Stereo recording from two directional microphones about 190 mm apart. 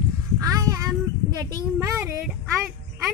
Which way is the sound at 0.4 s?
15° right (ahead or behind).